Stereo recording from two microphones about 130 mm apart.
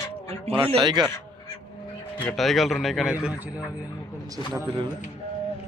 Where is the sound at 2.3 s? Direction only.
Centre (ahead or behind).